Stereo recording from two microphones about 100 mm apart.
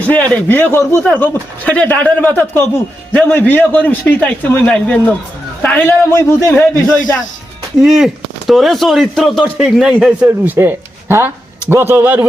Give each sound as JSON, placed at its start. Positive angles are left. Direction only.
{"t": 0.1, "sound": "a man's voice", "side_deg": 15}
{"t": 7.8, "sound": "speech", "side_deg": -5}
{"t": 10.2, "sound": "a man's voice", "side_deg": -20}